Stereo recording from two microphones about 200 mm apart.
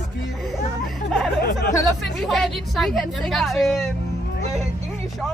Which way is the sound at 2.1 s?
Centre (ahead or behind).